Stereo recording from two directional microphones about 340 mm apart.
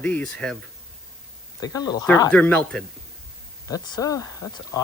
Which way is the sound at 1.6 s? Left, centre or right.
Centre.